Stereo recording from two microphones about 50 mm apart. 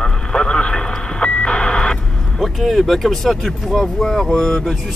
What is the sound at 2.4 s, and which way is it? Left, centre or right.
Speech, centre.